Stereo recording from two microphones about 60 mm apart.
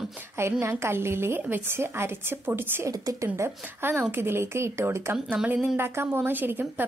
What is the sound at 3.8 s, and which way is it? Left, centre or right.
A woman's voice, right.